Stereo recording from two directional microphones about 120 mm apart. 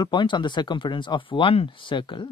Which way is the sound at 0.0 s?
40° left (ahead or behind).